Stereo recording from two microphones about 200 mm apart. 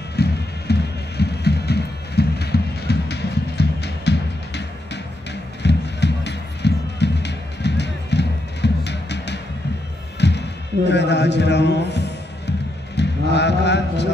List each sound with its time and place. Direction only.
0.1 s music: 55° left (ahead or behind)
10.1 s basketball bounce: 60° left (ahead or behind)
10.9 s music: 60° left (ahead or behind)